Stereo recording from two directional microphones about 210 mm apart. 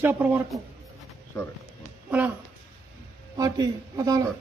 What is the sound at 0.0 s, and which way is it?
Speech, 10° right (ahead or behind).